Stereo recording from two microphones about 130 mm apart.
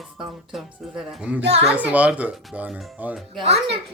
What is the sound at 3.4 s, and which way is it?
Speech, 55° right (ahead or behind).